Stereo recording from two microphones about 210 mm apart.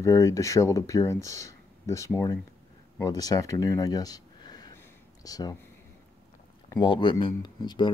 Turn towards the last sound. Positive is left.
turn(degrees=20)  # may be behind; listen again after turning